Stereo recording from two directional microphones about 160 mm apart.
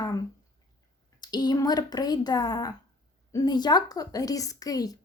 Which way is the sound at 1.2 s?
25° left (ahead or behind).